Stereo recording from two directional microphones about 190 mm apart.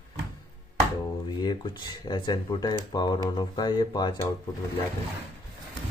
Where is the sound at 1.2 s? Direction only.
25° left (ahead or behind).